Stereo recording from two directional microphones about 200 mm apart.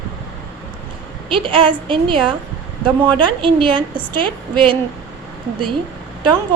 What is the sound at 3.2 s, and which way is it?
A woman's voice, 25° right (ahead or behind).